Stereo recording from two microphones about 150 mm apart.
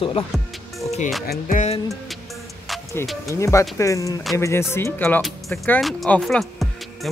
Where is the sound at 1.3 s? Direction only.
60° left (ahead or behind).